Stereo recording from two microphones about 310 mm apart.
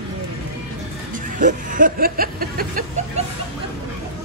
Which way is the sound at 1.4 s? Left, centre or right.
Right.